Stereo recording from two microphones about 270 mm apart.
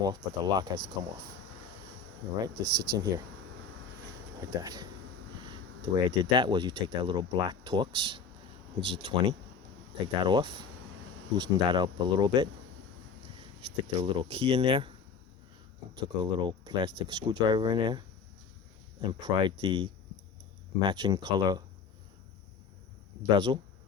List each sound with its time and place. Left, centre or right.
0.0 s speech: centre
2.6 s speech: centre
4.4 s speech: centre
13.6 s speech: centre
16.0 s speech: centre
23.2 s speech: centre